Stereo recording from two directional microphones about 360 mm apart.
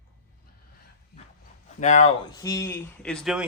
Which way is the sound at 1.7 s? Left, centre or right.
Centre.